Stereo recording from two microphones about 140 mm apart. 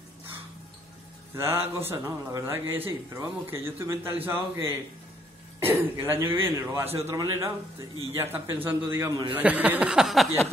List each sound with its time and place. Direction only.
1.3 s a man's voice: 20° right (ahead or behind)
9.1 s a man's voice: 30° right (ahead or behind)
9.4 s a man's voice: 10° right (ahead or behind)